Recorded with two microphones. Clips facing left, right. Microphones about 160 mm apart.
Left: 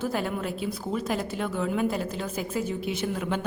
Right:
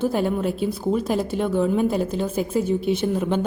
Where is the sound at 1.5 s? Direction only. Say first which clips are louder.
Right 8 dB; 30° right (ahead or behind).